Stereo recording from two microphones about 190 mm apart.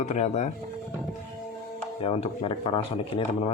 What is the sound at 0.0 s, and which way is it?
Speech, 35° left (ahead or behind).